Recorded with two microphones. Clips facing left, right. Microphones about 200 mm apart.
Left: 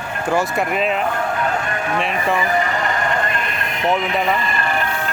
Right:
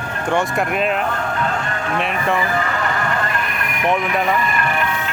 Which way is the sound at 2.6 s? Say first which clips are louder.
Left 1 dB; 20° left (ahead or behind).